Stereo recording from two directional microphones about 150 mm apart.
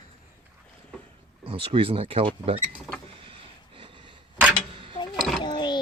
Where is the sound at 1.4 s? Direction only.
40° right (ahead or behind).